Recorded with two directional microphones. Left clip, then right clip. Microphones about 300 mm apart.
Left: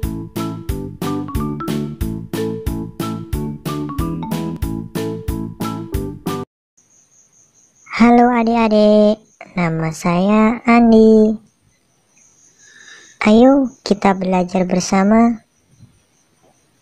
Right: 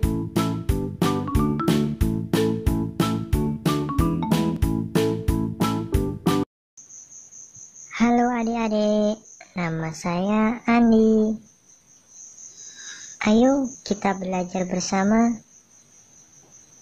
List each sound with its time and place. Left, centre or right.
0.0 s music: centre
7.9 s speech: centre
13.2 s speech: centre